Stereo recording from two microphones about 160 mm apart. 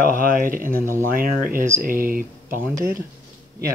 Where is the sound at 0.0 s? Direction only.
60° right (ahead or behind).